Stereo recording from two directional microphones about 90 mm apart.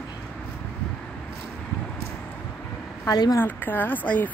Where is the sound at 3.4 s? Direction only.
20° left (ahead or behind).